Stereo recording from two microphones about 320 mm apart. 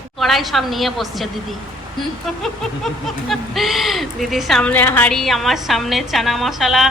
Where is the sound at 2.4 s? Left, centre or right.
Centre.